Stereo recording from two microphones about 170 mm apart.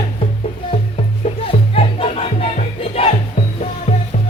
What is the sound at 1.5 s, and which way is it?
Music, 35° left (ahead or behind).